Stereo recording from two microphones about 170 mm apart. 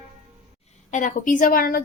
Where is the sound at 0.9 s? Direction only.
45° left (ahead or behind).